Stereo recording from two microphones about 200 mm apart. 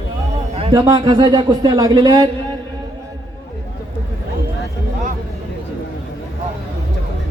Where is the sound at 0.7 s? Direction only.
20° right (ahead or behind).